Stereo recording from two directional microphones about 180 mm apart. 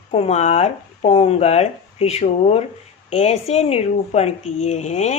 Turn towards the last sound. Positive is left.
turn(degrees=40)  # may be behind; listen again after turning